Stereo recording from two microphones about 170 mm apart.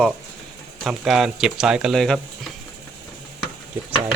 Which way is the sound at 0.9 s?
Centre (ahead or behind).